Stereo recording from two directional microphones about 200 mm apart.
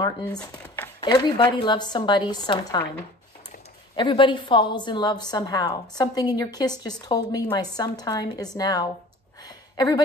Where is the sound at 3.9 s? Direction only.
25° left (ahead or behind).